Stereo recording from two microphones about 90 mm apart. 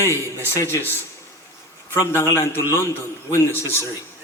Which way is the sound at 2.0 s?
25° left (ahead or behind).